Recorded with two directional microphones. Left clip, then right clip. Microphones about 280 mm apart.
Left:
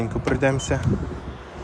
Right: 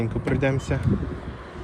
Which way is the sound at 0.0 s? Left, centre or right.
Centre.